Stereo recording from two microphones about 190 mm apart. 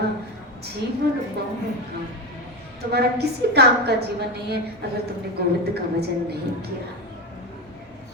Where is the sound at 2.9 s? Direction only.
60° right (ahead or behind).